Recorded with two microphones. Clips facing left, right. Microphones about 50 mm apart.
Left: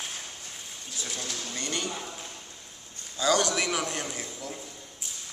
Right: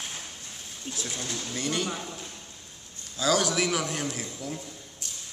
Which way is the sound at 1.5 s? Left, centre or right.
Centre.